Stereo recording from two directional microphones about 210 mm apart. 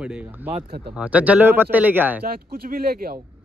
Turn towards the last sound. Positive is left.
turn(degrees=-45)  # may be behind; listen again after turning